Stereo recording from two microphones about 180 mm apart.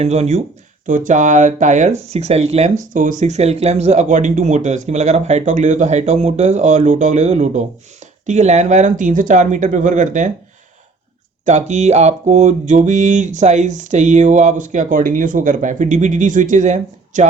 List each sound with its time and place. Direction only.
0.0 s speech: 35° right (ahead or behind)
8.3 s mantra: 40° right (ahead or behind)
11.4 s mantra: 40° right (ahead or behind)